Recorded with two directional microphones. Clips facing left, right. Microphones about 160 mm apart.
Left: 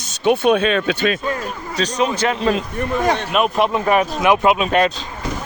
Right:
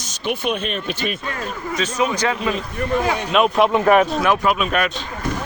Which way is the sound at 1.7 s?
30° left (ahead or behind).